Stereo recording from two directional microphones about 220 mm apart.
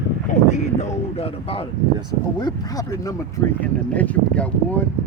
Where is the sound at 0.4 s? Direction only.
30° left (ahead or behind).